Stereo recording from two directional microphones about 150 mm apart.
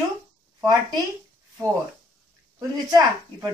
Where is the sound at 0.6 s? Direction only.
25° right (ahead or behind).